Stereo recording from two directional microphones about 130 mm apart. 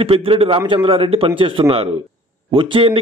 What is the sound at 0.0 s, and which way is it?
Speech, 45° right (ahead or behind).